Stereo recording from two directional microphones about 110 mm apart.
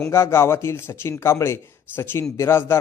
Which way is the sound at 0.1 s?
25° left (ahead or behind).